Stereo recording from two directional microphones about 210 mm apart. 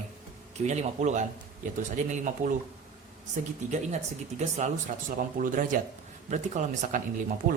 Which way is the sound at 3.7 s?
35° right (ahead or behind).